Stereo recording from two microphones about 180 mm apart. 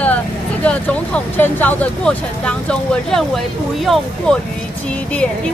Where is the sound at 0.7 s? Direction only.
10° left (ahead or behind).